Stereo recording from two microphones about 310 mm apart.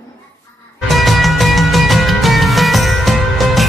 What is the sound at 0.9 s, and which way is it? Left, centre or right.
Music, centre.